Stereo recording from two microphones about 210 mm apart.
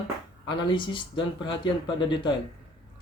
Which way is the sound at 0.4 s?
20° left (ahead or behind).